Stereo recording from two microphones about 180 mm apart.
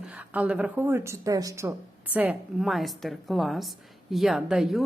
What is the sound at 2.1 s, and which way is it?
A woman's voice, 5° right (ahead or behind).